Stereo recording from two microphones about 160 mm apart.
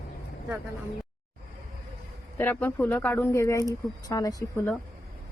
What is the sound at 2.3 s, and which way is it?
Speech, 10° left (ahead or behind).